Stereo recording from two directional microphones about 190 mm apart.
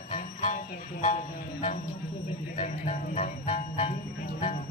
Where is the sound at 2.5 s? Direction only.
40° left (ahead or behind).